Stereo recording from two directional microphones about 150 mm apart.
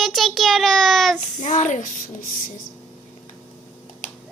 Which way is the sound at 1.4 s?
55° left (ahead or behind).